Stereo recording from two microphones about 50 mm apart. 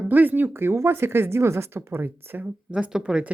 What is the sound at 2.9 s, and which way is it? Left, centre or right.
Speech, centre.